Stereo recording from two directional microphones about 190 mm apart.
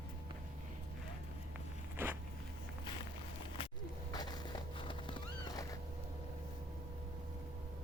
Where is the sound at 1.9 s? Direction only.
10° right (ahead or behind).